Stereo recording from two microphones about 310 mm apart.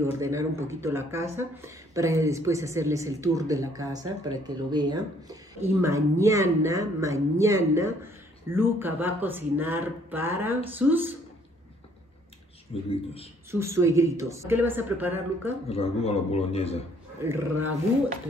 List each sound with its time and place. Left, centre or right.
0.0 s speech: centre
12.9 s a man's voice: centre
13.5 s speech: centre
15.7 s a man's voice: centre
17.2 s speech: centre